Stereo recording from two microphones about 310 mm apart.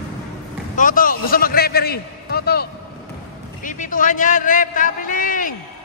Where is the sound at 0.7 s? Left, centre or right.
Left.